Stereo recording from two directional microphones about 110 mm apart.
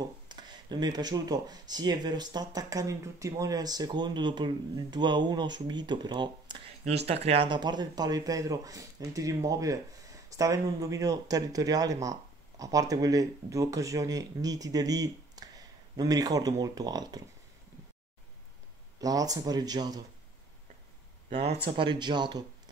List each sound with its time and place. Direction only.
0.0 s speech: 40° right (ahead or behind)
6.8 s speech: 70° right (ahead or behind)
7.4 s speech: 40° right (ahead or behind)
18.9 s speech: 35° right (ahead or behind)
21.6 s speech: 50° right (ahead or behind)